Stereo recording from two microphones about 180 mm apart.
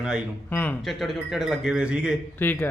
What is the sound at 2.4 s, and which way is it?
Speech, 10° left (ahead or behind).